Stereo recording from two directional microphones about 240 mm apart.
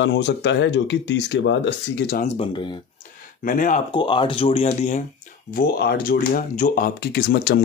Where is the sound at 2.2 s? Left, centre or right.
Left.